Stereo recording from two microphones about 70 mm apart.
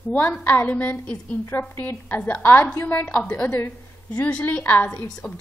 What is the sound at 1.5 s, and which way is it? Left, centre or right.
A woman's voice, left.